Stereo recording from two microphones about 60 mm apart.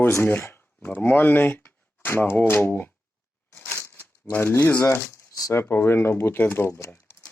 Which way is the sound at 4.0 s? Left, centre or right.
Left.